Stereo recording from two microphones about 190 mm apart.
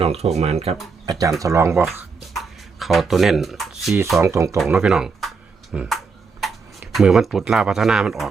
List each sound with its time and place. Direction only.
0.0 s speech: 35° right (ahead or behind)
1.4 s speech: 15° right (ahead or behind)
1.8 s a sound: centre (ahead or behind)
4.2 s speech: 15° right (ahead or behind)
4.5 s speech: 5° right (ahead or behind)